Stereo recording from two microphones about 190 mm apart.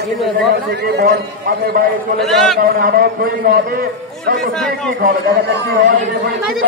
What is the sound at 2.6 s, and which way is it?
A man's voice, 50° right (ahead or behind).